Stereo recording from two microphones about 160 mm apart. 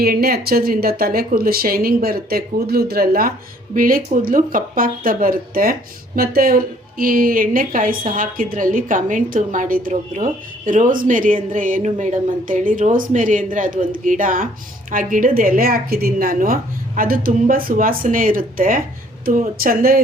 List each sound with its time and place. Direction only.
0.0 s a woman's voice: 75° right (ahead or behind)